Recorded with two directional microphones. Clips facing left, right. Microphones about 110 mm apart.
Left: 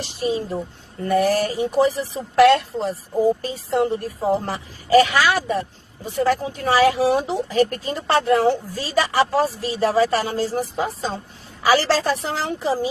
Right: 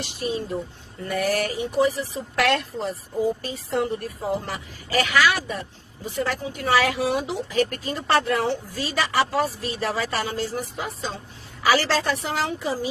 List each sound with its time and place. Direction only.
0.0 s a woman's voice: 30° left (ahead or behind)